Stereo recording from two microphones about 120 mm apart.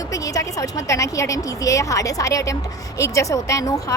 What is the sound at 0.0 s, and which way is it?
A woman's voice, 30° left (ahead or behind).